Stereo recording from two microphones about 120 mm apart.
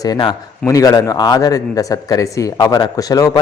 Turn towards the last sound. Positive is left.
turn(degrees=30)  # may be behind; listen again after turning